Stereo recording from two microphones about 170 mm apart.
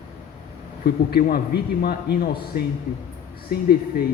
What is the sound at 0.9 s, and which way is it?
Speech, 65° left (ahead or behind).